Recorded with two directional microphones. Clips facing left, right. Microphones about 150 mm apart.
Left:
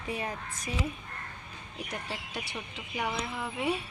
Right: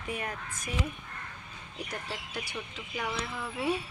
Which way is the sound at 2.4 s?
25° left (ahead or behind).